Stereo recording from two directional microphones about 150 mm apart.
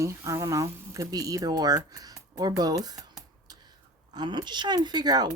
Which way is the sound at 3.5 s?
25° right (ahead or behind).